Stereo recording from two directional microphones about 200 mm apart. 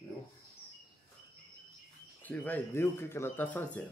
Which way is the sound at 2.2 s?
10° left (ahead or behind).